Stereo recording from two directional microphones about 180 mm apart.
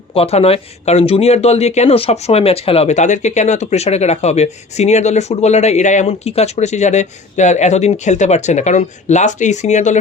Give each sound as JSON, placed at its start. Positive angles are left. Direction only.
{"t": 0.1, "sound": "speech", "side_deg": 35}